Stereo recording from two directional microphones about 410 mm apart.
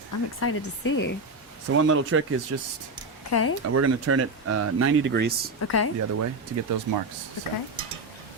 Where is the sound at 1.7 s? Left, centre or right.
Right.